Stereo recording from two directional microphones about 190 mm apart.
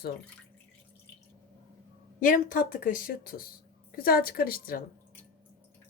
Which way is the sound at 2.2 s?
45° left (ahead or behind).